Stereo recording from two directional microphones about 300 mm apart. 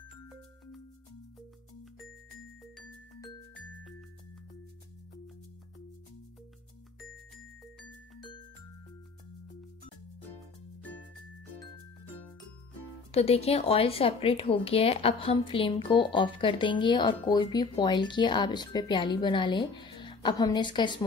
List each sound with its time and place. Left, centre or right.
10.8 s music: centre
13.1 s speech: centre